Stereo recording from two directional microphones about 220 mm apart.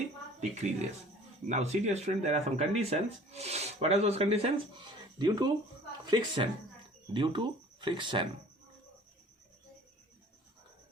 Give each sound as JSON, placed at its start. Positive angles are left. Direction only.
{"t": 0.3, "sound": "a woman's voice", "side_deg": -30}